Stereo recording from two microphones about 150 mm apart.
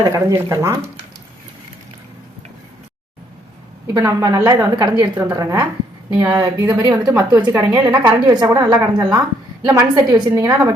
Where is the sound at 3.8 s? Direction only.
20° right (ahead or behind).